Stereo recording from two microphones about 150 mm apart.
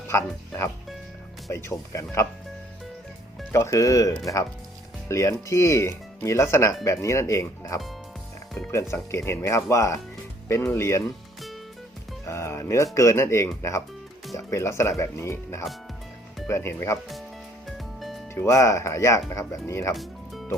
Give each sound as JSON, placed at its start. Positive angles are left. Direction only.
{"t": 0.1, "sound": "speech", "side_deg": 15}
{"t": 3.5, "sound": "speech", "side_deg": 20}
{"t": 12.2, "sound": "speech", "side_deg": 20}
{"t": 17.7, "sound": "music", "side_deg": 0}
{"t": 18.3, "sound": "speech", "side_deg": 20}
{"t": 19.9, "sound": "music", "side_deg": 0}